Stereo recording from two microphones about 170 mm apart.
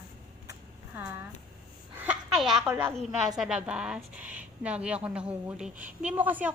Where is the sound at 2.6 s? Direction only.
10° right (ahead or behind).